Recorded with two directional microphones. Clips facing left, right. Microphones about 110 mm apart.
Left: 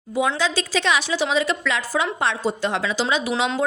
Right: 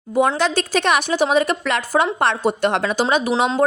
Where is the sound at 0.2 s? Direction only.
55° right (ahead or behind).